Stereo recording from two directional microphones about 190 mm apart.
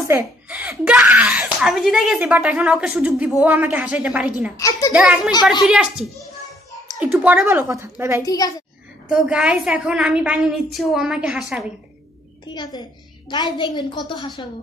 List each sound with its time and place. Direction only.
0.1 s speech: 10° right (ahead or behind)
4.6 s a child's voice: 20° left (ahead or behind)
4.9 s a woman's voice: 5° right (ahead or behind)
8.3 s a woman's voice: 20° left (ahead or behind)
9.1 s a woman's voice: 5° right (ahead or behind)
12.4 s a woman's voice: 20° left (ahead or behind)